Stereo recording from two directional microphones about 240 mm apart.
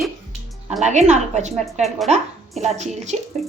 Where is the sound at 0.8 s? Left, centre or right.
Right.